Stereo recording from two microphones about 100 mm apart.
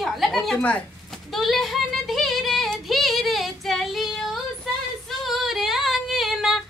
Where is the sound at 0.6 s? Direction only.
15° left (ahead or behind).